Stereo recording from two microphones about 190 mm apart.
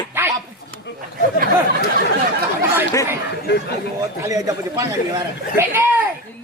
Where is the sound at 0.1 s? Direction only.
10° right (ahead or behind).